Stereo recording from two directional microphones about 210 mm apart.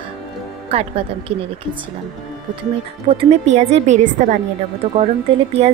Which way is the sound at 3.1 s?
25° right (ahead or behind).